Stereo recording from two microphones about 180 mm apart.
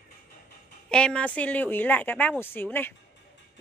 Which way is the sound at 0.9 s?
5° left (ahead or behind).